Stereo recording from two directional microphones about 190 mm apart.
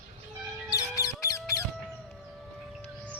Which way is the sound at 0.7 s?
15° left (ahead or behind).